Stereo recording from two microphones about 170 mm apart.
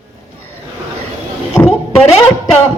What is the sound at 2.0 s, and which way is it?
Speech, 5° left (ahead or behind).